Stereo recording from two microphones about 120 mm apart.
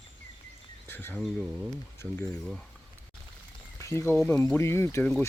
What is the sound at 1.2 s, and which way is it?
Speech, centre (ahead or behind).